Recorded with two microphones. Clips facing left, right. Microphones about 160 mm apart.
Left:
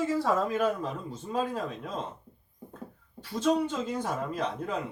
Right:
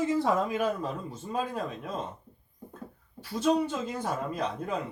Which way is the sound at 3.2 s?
10° right (ahead or behind).